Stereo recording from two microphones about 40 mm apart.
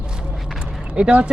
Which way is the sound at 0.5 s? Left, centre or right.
Right.